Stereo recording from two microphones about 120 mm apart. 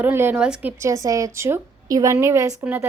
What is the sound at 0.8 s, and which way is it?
A woman's voice, 25° right (ahead or behind).